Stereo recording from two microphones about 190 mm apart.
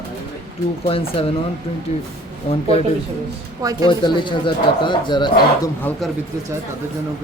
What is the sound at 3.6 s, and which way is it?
Speech, 20° right (ahead or behind).